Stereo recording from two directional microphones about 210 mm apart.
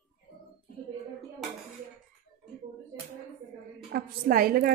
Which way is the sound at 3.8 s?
45° right (ahead or behind).